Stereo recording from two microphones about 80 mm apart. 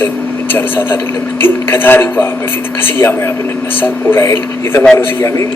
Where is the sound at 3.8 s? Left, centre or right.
Left.